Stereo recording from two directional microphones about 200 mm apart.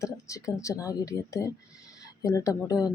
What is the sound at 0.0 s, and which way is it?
Speech, 15° left (ahead or behind).